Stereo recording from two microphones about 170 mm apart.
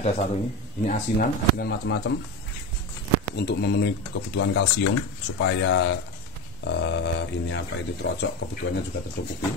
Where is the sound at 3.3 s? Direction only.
80° left.